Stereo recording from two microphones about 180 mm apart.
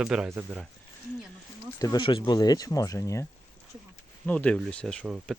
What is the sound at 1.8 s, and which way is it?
Speech, 20° left (ahead or behind).